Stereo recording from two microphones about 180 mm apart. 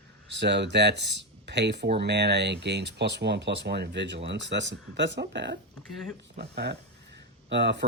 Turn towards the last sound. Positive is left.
turn(degrees=-75)  # may be behind; listen again after turning